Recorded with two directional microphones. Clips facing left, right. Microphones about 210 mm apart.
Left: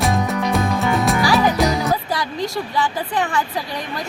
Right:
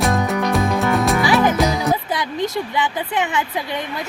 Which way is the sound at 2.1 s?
20° right (ahead or behind).